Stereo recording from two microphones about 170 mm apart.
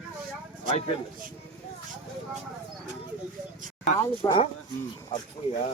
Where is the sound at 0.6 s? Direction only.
35° left (ahead or behind).